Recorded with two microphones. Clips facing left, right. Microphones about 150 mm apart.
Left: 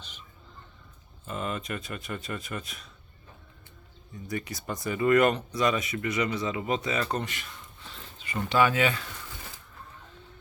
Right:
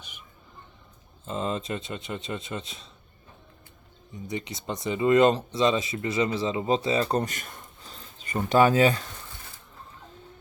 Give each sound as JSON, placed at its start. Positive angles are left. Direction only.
{"t": 0.0, "sound": "a sound", "side_deg": -10}
{"t": 1.2, "sound": "speech", "side_deg": -25}
{"t": 4.1, "sound": "speech", "side_deg": -20}